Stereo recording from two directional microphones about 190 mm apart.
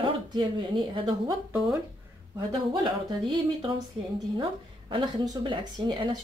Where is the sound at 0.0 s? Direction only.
25° right (ahead or behind).